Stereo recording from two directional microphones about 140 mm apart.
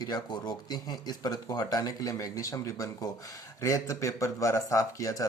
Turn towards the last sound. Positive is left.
turn(degrees=20)  # may be behind; listen again after turning